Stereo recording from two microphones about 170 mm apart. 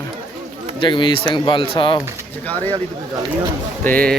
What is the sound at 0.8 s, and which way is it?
Speech, 30° left (ahead or behind).